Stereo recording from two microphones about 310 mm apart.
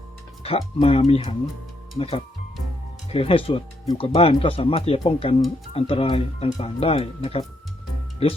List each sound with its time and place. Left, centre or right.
0.8 s speech: centre